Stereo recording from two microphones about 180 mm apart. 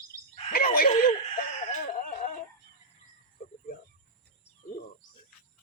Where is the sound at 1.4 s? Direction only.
40° left (ahead or behind).